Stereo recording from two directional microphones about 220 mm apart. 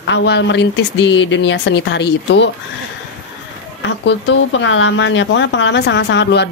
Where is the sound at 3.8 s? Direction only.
55° left (ahead or behind).